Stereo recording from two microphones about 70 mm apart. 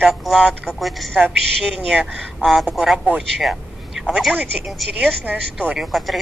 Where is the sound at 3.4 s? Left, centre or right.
Centre.